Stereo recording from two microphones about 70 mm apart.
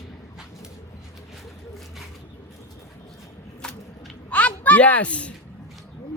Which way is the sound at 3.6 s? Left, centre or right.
Centre.